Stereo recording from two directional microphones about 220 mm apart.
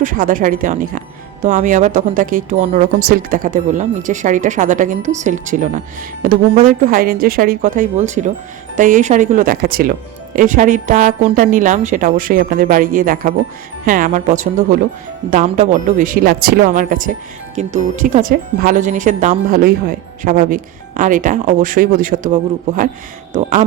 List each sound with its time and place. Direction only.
0.0 s speech: 35° right (ahead or behind)